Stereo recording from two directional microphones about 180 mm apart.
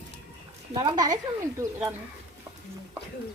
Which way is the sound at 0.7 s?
25° right (ahead or behind).